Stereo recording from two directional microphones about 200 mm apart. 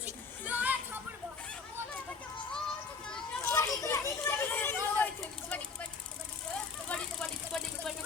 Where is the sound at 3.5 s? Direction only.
15° left (ahead or behind).